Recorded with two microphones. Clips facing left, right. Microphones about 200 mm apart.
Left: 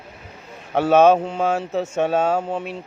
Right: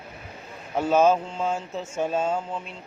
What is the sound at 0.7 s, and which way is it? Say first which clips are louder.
A man's voice: left 6 dB; 70° left (ahead or behind).